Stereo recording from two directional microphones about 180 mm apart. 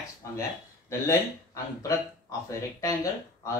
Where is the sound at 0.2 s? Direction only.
15° left (ahead or behind).